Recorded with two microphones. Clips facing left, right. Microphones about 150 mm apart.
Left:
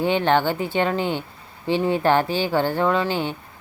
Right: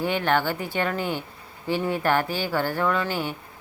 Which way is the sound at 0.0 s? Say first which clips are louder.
Left 4 dB; 25° left (ahead or behind).